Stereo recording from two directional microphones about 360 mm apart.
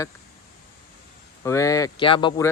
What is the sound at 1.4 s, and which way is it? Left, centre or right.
Speech, centre.